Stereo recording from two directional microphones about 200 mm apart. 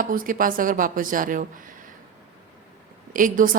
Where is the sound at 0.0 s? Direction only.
45° right (ahead or behind).